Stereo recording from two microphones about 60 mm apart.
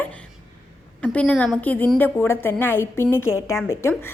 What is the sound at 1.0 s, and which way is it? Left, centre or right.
Speech, left.